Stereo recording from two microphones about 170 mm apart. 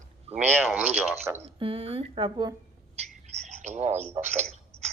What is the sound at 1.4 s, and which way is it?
Speech, 35° right (ahead or behind).